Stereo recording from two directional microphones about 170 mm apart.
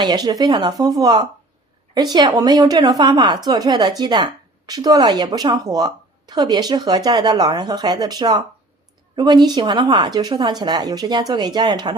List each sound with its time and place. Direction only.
0.0 s speech: 25° right (ahead or behind)